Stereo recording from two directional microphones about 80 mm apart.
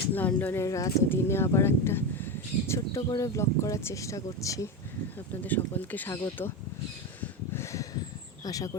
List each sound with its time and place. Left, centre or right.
0.1 s speech: left
0.6 s speech: left
1.1 s speech: left
5.3 s speech: left
7.2 s snort: left
8.4 s speech: left